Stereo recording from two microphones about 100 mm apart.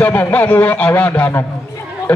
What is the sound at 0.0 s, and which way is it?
A man's voice, 20° left (ahead or behind).